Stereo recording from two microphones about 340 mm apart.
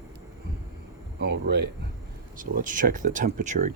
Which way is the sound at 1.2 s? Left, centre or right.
Right.